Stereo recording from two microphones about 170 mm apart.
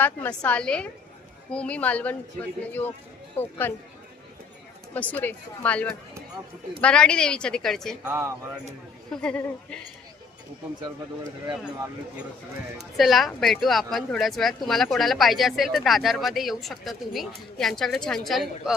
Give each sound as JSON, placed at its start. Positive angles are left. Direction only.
{"t": 0.0, "sound": "speech", "side_deg": 10}
{"t": 4.9, "sound": "speech", "side_deg": 10}
{"t": 8.0, "sound": "speech", "side_deg": -15}
{"t": 9.0, "sound": "speech", "side_deg": 5}
{"t": 13.0, "sound": "speech", "side_deg": 0}